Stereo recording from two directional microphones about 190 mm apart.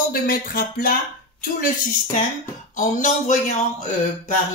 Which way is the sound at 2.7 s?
45° left (ahead or behind).